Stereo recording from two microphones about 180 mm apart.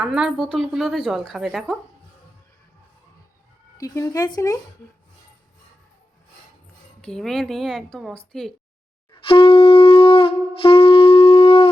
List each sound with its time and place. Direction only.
0.0 s speech: 5° right (ahead or behind)
3.8 s speech: 20° left (ahead or behind)
7.0 s speech: 5° left (ahead or behind)
9.2 s wind instrument: 30° left (ahead or behind)